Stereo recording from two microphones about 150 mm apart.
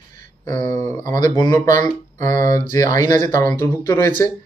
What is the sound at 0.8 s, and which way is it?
Speech, 55° right (ahead or behind).